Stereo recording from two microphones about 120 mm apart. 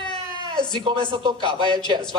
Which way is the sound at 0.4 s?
40° left (ahead or behind).